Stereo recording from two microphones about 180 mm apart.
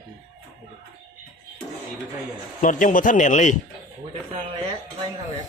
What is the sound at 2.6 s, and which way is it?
Speech, 45° left (ahead or behind).